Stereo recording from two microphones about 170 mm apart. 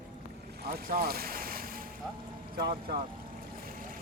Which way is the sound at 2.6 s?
60° right (ahead or behind).